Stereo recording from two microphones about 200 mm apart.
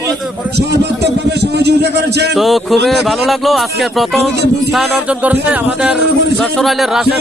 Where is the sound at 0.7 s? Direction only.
55° right (ahead or behind).